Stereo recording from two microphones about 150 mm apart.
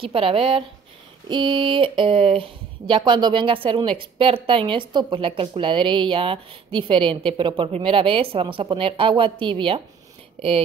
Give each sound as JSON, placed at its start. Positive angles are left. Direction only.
{"t": 0.0, "sound": "speech", "side_deg": -35}